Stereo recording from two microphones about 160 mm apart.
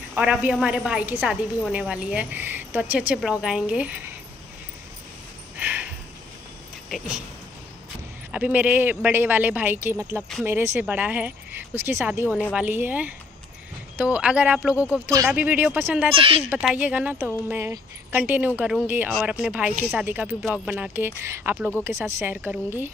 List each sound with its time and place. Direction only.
0.1 s speech: 5° right (ahead or behind)
5.6 s a sound: 10° right (ahead or behind)
6.9 s speech: centre (ahead or behind)
8.3 s speech: 10° right (ahead or behind)
16.2 s speech: 35° right (ahead or behind)
16.4 s speech: 5° right (ahead or behind)